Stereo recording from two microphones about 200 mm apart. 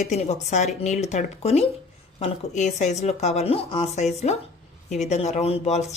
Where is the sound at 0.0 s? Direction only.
35° left (ahead or behind).